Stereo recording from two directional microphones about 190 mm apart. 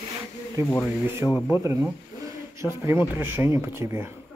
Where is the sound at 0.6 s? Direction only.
15° left (ahead or behind).